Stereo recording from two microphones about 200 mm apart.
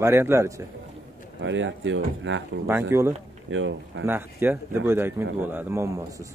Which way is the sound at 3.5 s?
75° right (ahead or behind).